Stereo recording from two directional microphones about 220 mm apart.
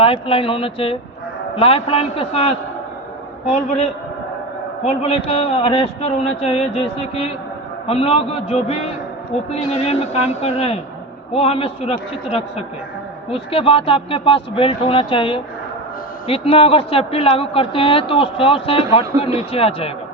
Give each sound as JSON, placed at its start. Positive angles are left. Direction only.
{"t": 0.0, "sound": "a man's voice", "side_deg": 25}
{"t": 7.9, "sound": "a man's voice", "side_deg": 25}